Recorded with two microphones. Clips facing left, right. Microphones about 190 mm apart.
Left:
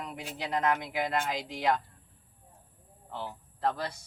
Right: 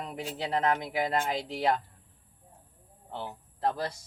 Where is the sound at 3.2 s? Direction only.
30° right (ahead or behind).